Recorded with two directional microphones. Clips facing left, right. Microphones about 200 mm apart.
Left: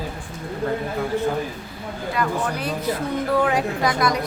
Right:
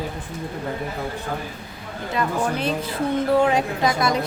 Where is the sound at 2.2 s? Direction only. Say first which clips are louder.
Right 2 dB; 25° right (ahead or behind).